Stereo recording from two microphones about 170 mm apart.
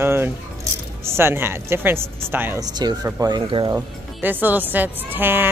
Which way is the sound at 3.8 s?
10° right (ahead or behind).